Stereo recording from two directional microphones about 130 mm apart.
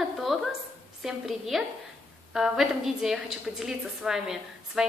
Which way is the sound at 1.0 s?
Centre (ahead or behind).